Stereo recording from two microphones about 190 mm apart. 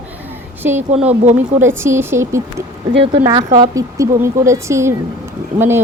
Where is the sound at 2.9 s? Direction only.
30° right (ahead or behind); by 5.8 s 10° right (ahead or behind).